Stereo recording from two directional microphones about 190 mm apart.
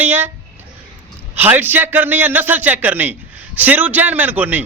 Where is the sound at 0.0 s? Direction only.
10° right (ahead or behind).